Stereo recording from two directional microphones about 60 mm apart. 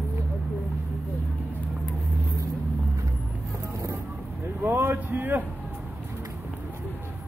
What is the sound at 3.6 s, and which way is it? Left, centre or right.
Vehicle, right.